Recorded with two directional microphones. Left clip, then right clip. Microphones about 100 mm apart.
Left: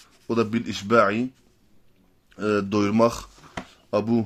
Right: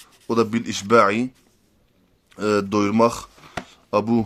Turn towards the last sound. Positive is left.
turn(degrees=-35)  # may be behind; listen again after turning